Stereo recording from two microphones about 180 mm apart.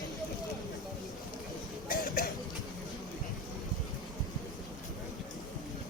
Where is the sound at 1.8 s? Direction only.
55° left (ahead or behind).